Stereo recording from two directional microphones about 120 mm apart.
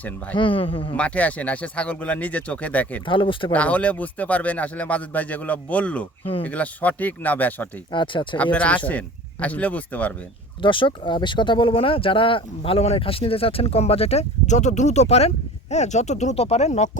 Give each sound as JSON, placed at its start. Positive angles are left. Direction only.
{"t": 0.3, "sound": "speech", "side_deg": 45}
{"t": 0.9, "sound": "a man's voice", "side_deg": 10}
{"t": 3.1, "sound": "speech", "side_deg": 45}
{"t": 3.5, "sound": "a man's voice", "side_deg": 10}
{"t": 7.9, "sound": "speech", "side_deg": 45}
{"t": 8.5, "sound": "a man's voice", "side_deg": 10}
{"t": 10.6, "sound": "speech", "side_deg": 45}
{"t": 15.7, "sound": "speech", "side_deg": 75}